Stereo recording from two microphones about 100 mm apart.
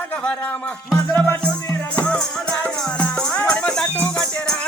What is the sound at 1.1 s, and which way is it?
Music, 15° left (ahead or behind).